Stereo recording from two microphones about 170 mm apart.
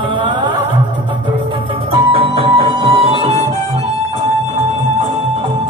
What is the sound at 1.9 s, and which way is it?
Music, 30° right (ahead or behind).